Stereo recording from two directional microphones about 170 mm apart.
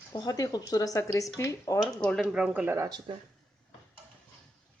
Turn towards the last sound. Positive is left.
turn(degrees=-20)  # may be behind; listen again after turning